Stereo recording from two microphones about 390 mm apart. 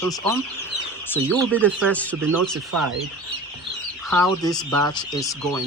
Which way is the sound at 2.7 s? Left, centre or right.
Right.